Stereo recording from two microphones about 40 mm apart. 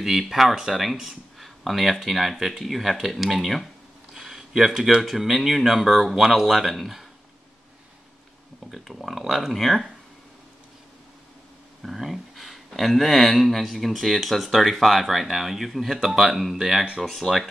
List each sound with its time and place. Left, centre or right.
0.0 s speech: centre
4.1 s a sound: centre
5.0 s speech: centre
8.8 s speech: centre
11.8 s speech: centre